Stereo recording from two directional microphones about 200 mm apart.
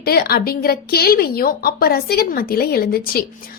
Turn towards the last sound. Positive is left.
turn(degrees=50)  # may be behind; listen again after turning